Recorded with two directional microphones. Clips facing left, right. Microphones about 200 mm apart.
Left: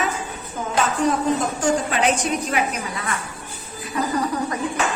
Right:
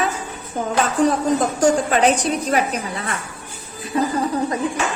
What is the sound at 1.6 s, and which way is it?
A woman's voice, 35° right (ahead or behind).